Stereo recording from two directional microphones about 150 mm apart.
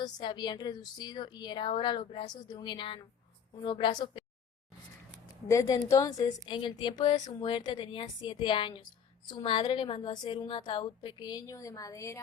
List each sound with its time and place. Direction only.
0.0 s a woman's voice: 30° left (ahead or behind)
5.5 s a woman's voice: 25° left (ahead or behind)